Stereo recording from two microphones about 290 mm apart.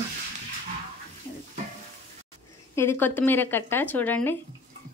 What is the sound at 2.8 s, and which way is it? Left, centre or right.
A woman's voice, centre.